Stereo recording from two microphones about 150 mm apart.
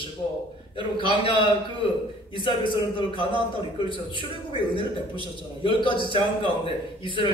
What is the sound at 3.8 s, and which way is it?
Speech, 35° left (ahead or behind).